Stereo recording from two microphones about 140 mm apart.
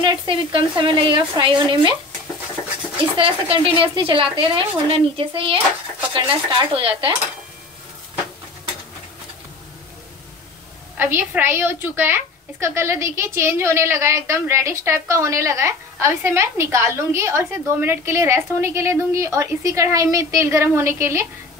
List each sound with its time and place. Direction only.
0.0 s speech: 35° right (ahead or behind)
3.0 s speech: 40° right (ahead or behind)
11.0 s a woman's voice: 15° right (ahead or behind)